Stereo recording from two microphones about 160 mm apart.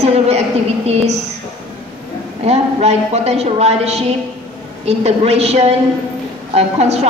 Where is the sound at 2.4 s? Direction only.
40° right (ahead or behind).